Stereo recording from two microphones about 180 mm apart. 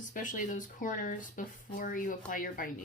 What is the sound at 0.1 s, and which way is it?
Speech, 50° left (ahead or behind).